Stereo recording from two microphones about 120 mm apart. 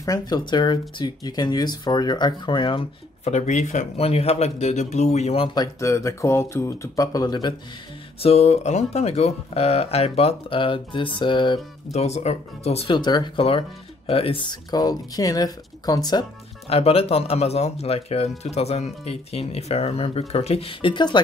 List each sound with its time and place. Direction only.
0.0 s speech: 35° left (ahead or behind)
3.3 s speech: 75° left (ahead or behind); by 5.5 s 60° left (ahead or behind)
5.5 s speech: 30° left (ahead or behind)
8.2 s speech: 60° left (ahead or behind); by 11.6 s 40° left (ahead or behind)
11.9 s speech: 65° left (ahead or behind)
12.9 s speech: 40° left (ahead or behind)
13.5 s speech: 55° left (ahead or behind); by 16.3 s 35° left (ahead or behind)
16.6 s speech: 55° left (ahead or behind); by 21.2 s 40° left (ahead or behind)